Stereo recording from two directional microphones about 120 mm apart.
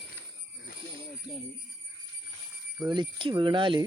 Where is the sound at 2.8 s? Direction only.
40° right (ahead or behind).